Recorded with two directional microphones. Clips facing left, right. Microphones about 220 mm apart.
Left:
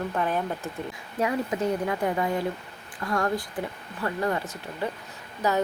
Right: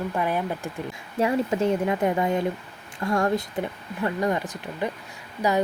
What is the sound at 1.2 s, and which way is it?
Speech, 25° right (ahead or behind).